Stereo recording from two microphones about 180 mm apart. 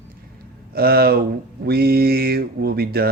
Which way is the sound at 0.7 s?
60° right (ahead or behind).